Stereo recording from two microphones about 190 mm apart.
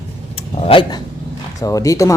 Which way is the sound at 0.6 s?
25° left (ahead or behind).